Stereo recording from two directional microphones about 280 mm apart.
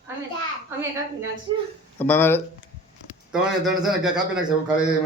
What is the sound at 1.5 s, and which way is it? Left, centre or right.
Speech, centre.